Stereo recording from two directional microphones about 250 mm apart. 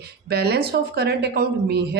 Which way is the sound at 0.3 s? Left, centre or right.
Right.